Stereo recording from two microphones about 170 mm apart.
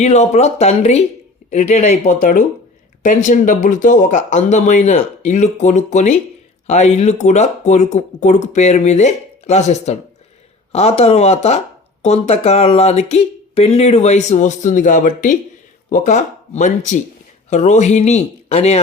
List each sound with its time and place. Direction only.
0.0 s speech: 40° left (ahead or behind)